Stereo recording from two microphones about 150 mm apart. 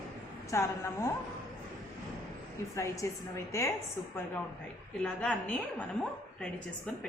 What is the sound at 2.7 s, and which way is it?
Speech, 20° left (ahead or behind).